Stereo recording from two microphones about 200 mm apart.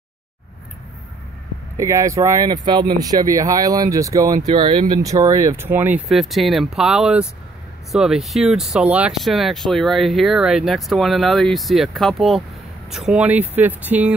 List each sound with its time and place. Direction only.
1.8 s speech: 15° right (ahead or behind)